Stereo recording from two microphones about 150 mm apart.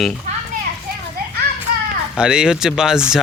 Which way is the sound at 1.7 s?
75° right (ahead or behind).